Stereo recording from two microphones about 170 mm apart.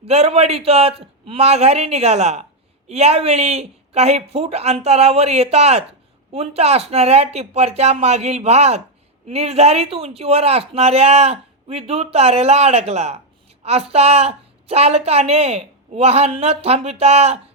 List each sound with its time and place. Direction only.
0.0 s speech: 35° right (ahead or behind)